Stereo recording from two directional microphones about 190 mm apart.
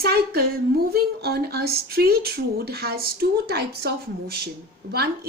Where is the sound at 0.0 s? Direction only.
55° right (ahead or behind).